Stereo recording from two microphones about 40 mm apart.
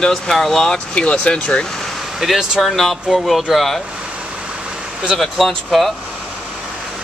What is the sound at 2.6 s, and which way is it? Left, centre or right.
Speech, centre.